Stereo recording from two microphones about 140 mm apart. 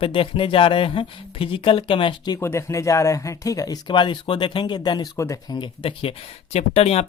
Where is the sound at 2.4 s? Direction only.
20° left (ahead or behind).